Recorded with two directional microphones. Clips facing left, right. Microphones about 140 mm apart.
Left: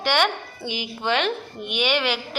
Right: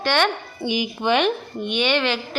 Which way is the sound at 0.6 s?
15° right (ahead or behind).